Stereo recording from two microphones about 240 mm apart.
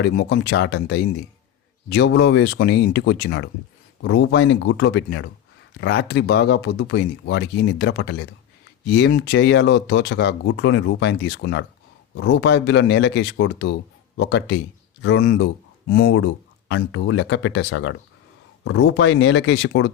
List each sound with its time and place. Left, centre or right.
0.0 s speech: left